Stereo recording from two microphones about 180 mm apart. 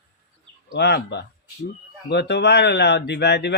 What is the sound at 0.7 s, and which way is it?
A man's voice, 65° left (ahead or behind).